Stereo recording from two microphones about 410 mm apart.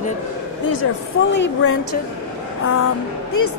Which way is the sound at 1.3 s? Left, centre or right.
Left.